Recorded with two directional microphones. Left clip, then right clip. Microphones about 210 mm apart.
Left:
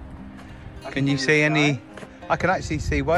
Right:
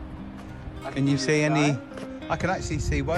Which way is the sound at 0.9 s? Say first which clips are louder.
Left 4 dB; 10° right (ahead or behind).